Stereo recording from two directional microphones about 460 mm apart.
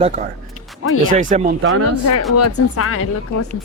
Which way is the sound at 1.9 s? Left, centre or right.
Left.